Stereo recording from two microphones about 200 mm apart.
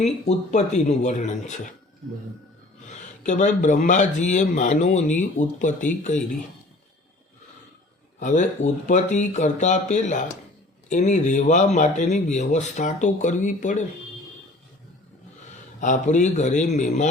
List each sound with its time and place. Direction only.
0.0 s speech: 35° left (ahead or behind)
3.2 s speech: 35° left (ahead or behind)
8.2 s speech: 35° left (ahead or behind)
15.8 s speech: 40° left (ahead or behind)